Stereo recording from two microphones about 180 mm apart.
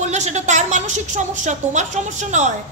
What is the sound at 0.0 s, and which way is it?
A woman's voice, 40° right (ahead or behind).